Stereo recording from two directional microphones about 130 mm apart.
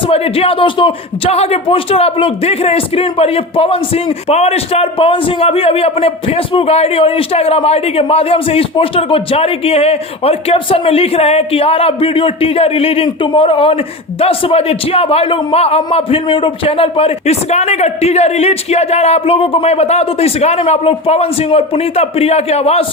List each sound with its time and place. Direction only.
0.1 s speech: 45° left (ahead or behind)